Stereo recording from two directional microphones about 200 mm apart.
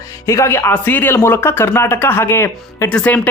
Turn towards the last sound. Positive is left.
turn(degrees=5)  # may be behind; listen again after turning